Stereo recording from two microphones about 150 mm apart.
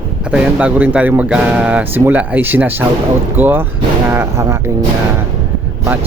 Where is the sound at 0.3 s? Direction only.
10° right (ahead or behind).